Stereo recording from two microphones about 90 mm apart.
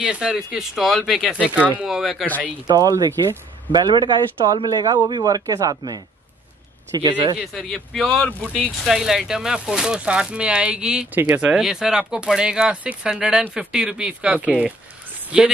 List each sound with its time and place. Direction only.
0.0 s speech: 10° right (ahead or behind)
2.6 s speech: 45° right (ahead or behind)
3.7 s speech: 55° right (ahead or behind)
7.0 s speech: 60° right (ahead or behind)
7.7 s speech: 5° left (ahead or behind)
8.6 s speech: 5° right (ahead or behind)
11.5 s speech: 5° right (ahead or behind)